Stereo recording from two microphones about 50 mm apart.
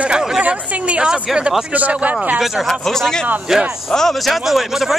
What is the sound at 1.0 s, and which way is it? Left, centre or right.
Speech, centre.